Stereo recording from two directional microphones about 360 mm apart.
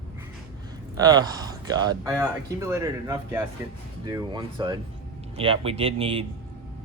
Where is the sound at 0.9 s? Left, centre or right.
Centre.